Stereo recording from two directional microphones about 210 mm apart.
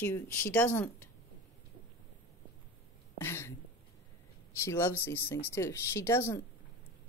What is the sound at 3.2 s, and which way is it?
Speech, 10° left (ahead or behind).